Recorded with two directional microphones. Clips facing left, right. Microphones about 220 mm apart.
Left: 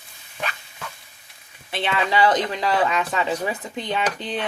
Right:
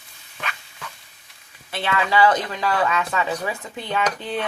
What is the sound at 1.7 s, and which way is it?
A woman's voice, 20° left (ahead or behind).